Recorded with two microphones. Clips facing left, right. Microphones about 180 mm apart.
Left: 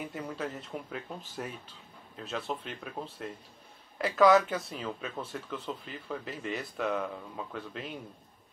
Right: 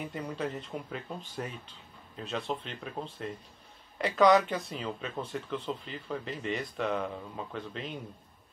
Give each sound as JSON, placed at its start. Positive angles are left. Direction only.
{"t": 0.1, "sound": "speech", "side_deg": 0}